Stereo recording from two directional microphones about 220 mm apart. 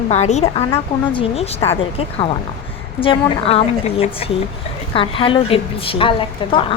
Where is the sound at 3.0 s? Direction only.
25° left (ahead or behind).